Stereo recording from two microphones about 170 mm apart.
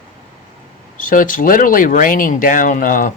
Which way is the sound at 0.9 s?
50° left (ahead or behind).